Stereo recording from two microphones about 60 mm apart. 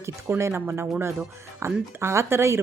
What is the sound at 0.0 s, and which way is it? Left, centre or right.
Speech, right.